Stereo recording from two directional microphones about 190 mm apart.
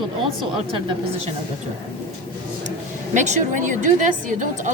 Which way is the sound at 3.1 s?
40° right (ahead or behind).